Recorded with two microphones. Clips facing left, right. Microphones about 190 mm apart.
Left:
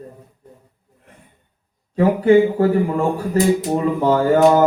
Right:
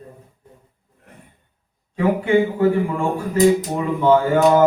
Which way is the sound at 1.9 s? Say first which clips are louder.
Left 4 dB; 40° left (ahead or behind).